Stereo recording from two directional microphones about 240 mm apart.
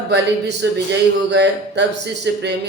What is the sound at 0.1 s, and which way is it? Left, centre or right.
Speech, right.